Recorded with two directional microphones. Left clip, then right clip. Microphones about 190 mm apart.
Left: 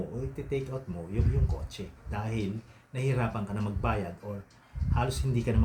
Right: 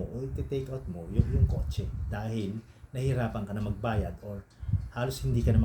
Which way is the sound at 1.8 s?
5° right (ahead or behind).